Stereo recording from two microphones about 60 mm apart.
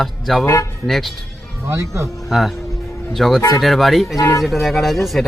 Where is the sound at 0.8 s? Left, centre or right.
Centre.